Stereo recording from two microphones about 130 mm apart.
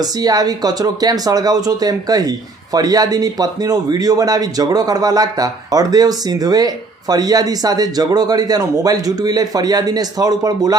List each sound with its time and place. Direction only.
0.0 s a man's voice: 30° right (ahead or behind)